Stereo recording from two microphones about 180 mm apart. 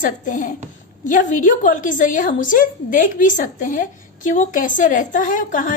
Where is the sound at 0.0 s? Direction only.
45° left (ahead or behind).